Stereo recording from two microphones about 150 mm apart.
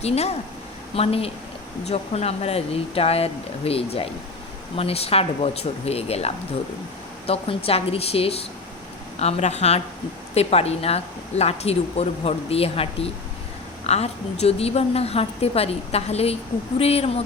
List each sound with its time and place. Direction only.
0.9 s a woman's voice: 40° left (ahead or behind)